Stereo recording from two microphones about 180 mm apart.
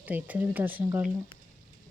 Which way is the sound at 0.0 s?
10° right (ahead or behind).